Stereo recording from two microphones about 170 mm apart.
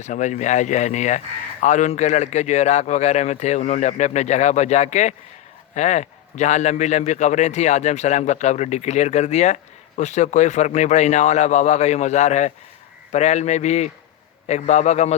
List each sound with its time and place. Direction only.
0.0 s a man's voice: 45° left (ahead or behind)